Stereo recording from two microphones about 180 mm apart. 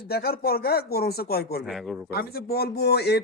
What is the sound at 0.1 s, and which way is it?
Speech, 60° left (ahead or behind).